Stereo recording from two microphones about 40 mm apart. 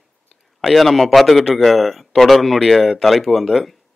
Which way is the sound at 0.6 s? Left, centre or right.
Centre.